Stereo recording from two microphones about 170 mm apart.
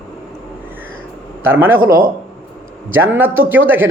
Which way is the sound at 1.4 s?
15° right (ahead or behind).